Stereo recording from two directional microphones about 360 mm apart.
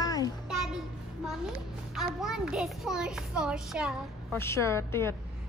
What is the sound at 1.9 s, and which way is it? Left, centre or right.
A child's voice, centre.